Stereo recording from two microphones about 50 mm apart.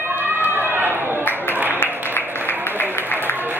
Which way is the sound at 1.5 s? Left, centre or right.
Right.